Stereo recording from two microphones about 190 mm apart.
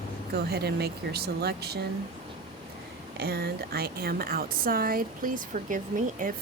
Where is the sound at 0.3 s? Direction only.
60° right (ahead or behind).